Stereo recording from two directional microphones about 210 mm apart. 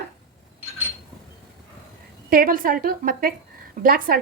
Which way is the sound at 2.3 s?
45° right (ahead or behind).